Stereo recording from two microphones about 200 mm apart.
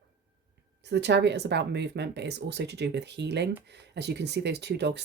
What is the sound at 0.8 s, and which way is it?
Speech, 60° right (ahead or behind).